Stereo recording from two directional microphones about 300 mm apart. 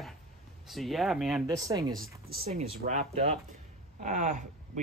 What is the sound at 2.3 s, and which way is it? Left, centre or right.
Speech, right.